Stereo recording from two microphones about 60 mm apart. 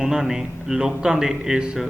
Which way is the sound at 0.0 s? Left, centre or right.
Centre.